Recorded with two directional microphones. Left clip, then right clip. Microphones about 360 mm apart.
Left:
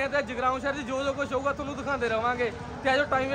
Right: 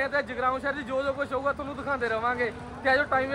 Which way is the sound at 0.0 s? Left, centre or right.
Centre.